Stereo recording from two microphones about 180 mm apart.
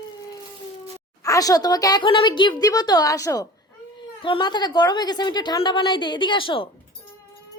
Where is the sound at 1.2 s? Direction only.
20° left (ahead or behind).